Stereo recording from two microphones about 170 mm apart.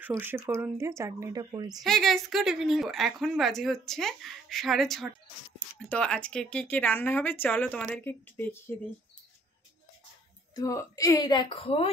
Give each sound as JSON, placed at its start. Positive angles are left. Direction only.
{"t": 0.0, "sound": "speech", "side_deg": -10}
{"t": 1.8, "sound": "a woman's voice", "side_deg": 0}
{"t": 10.5, "sound": "a woman's voice", "side_deg": 20}